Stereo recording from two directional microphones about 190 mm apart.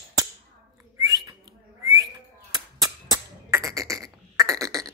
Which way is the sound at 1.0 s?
20° right (ahead or behind).